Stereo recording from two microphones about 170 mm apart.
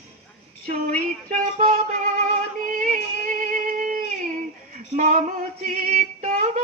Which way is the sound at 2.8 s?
45° right (ahead or behind).